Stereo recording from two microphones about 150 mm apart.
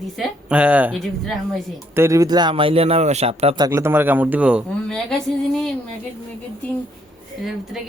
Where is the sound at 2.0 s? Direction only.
20° right (ahead or behind); by 3.6 s 40° right (ahead or behind).